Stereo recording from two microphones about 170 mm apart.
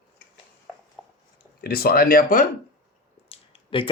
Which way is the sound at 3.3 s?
30° left (ahead or behind).